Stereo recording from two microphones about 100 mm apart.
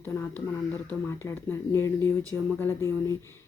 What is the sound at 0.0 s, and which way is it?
A woman's voice, 20° left (ahead or behind).